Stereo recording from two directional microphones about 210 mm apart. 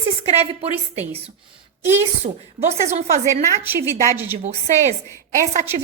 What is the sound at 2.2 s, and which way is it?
A woman's voice, 30° right (ahead or behind).